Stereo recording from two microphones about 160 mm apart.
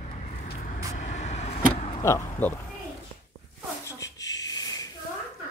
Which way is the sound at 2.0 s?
15° left (ahead or behind).